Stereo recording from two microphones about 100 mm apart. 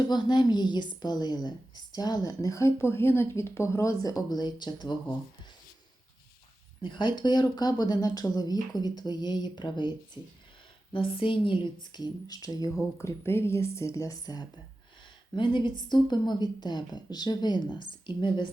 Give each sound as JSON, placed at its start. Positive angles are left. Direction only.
{"t": 0.1, "sound": "a woman's voice", "side_deg": 45}
{"t": 6.8, "sound": "speech", "side_deg": 50}
{"t": 10.9, "sound": "speech", "side_deg": 60}
{"t": 13.0, "sound": "speech", "side_deg": 25}
{"t": 15.4, "sound": "speech", "side_deg": 50}